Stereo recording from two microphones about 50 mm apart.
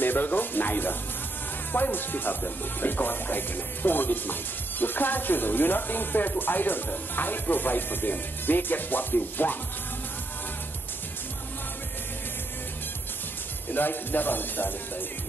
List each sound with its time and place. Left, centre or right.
0.0 s speech: left
13.7 s speech: left